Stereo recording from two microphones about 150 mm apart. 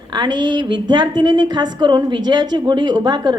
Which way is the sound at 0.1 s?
30° right (ahead or behind).